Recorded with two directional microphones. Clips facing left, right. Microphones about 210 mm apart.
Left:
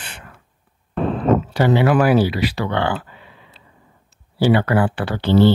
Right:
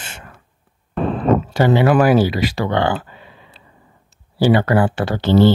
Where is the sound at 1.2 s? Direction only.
40° right (ahead or behind).